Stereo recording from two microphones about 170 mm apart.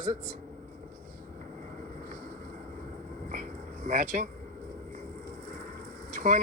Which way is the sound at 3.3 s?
50° right (ahead or behind).